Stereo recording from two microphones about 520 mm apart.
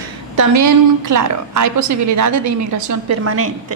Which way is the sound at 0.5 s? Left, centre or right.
Right.